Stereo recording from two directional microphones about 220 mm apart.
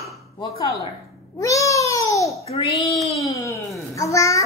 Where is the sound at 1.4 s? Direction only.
15° left (ahead or behind).